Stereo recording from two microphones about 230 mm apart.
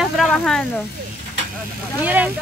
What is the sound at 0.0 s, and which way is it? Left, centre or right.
Vehicle, centre.